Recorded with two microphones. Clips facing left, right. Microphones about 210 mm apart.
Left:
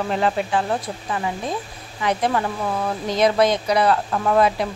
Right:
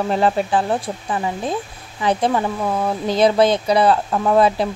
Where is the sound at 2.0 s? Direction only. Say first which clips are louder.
Right 3 dB; 30° right (ahead or behind).